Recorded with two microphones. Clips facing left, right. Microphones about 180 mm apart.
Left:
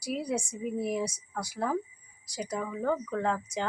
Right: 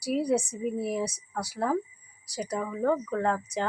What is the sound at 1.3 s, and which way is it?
Speech, 10° right (ahead or behind).